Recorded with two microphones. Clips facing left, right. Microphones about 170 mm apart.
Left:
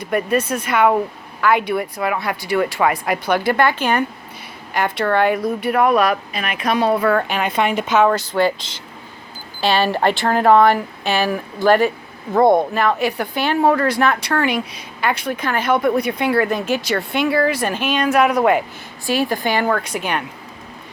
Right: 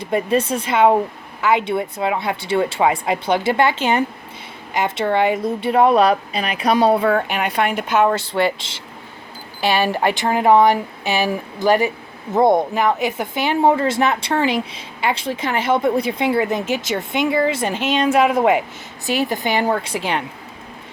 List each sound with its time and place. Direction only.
0.0 s speech: 25° right (ahead or behind)
7.0 s speech: 15° right (ahead or behind)
8.1 s speech: 25° right (ahead or behind)
9.6 s speech: 15° right (ahead or behind)